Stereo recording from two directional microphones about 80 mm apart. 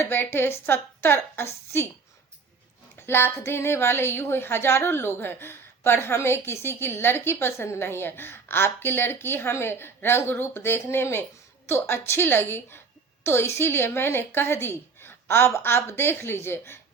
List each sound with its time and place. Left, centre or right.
0.0 s speech: left
3.1 s speech: left